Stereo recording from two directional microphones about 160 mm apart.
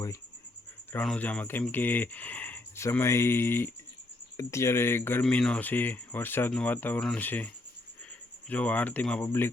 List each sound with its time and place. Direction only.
0.9 s speech: 10° left (ahead or behind)